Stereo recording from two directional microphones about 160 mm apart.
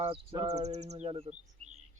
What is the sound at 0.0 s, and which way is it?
Speech, 35° right (ahead or behind).